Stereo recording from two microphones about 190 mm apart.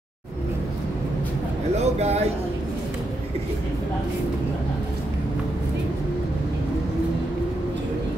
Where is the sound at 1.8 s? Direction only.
35° right (ahead or behind).